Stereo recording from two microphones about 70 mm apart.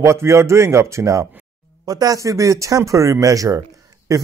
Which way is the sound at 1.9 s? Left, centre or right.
Right.